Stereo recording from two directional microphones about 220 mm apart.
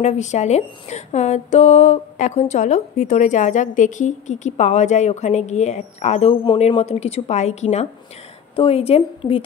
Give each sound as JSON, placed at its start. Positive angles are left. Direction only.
{"t": 0.0, "sound": "a woman's voice", "side_deg": 30}